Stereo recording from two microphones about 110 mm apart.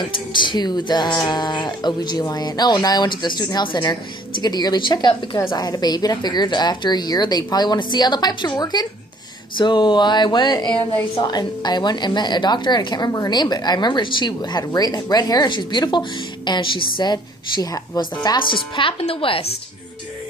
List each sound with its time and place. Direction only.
0.1 s a woman's voice: 45° left (ahead or behind)
9.6 s a sound: 45° left (ahead or behind)
11.2 s a woman's voice: 40° left (ahead or behind); by 19.4 s 60° left (ahead or behind)